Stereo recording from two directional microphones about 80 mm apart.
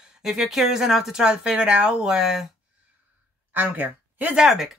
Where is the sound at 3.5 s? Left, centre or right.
Right.